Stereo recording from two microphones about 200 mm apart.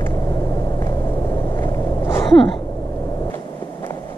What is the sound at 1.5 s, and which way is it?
Vehicle, 10° left (ahead or behind).